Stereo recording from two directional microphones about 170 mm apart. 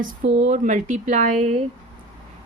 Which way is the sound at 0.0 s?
50° right (ahead or behind).